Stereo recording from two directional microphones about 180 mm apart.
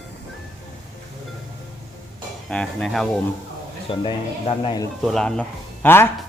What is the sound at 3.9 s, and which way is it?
Speech, 25° left (ahead or behind).